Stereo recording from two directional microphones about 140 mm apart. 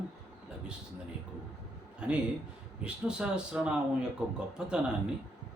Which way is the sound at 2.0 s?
5° right (ahead or behind).